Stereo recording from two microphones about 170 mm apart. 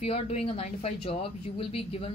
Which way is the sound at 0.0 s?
35° left (ahead or behind).